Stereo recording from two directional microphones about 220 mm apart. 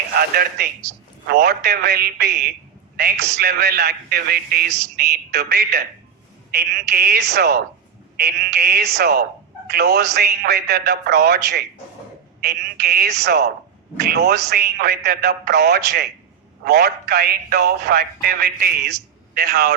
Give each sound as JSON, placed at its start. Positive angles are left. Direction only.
{"t": 0.2, "sound": "a man's voice", "side_deg": -45}
{"t": 2.9, "sound": "a sound", "side_deg": -45}
{"t": 3.4, "sound": "a man's voice", "side_deg": -45}